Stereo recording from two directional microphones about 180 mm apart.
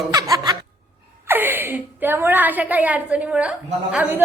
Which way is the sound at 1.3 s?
10° right (ahead or behind).